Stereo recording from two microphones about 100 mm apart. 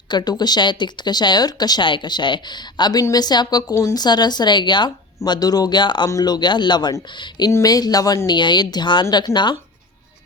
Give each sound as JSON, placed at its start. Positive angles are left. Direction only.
{"t": 0.1, "sound": "a woman's voice", "side_deg": 45}
{"t": 6.1, "sound": "speech", "side_deg": 40}